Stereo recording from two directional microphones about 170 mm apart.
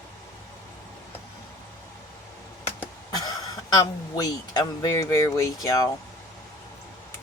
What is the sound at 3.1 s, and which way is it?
A man's voice, 20° left (ahead or behind).